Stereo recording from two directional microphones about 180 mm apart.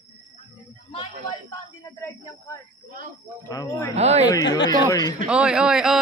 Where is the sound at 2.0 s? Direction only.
15° left (ahead or behind).